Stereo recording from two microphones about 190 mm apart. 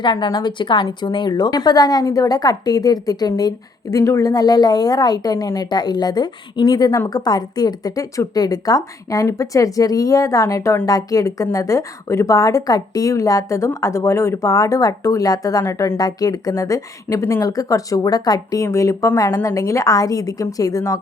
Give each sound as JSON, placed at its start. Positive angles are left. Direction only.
{"t": 0.0, "sound": "a woman's voice", "side_deg": 25}